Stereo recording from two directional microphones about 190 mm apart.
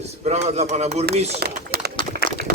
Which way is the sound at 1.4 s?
60° right (ahead or behind).